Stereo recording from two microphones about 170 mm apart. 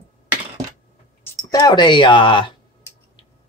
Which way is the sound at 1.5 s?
25° left (ahead or behind).